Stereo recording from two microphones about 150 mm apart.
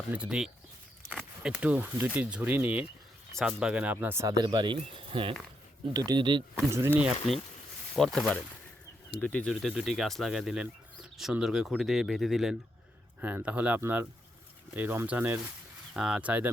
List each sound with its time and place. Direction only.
0.1 s speech: 5° right (ahead or behind); by 6.4 s 30° right (ahead or behind)
6.7 s speech: 20° right (ahead or behind)
7.9 s speech: 5° left (ahead or behind)